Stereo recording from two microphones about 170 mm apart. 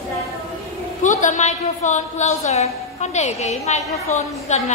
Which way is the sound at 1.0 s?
45° left (ahead or behind).